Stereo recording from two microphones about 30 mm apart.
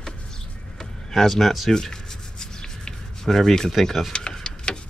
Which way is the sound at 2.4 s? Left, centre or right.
Left.